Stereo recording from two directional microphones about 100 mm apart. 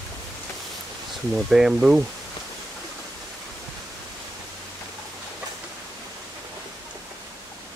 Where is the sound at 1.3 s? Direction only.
5° right (ahead or behind).